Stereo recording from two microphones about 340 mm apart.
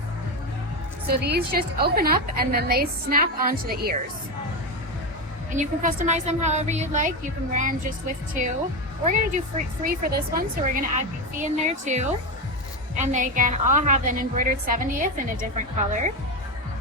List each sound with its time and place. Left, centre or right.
1.0 s a woman's voice: right
5.5 s a woman's voice: right
9.0 s a woman's voice: right